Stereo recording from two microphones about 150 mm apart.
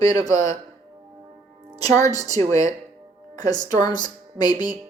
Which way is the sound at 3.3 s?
25° left (ahead or behind).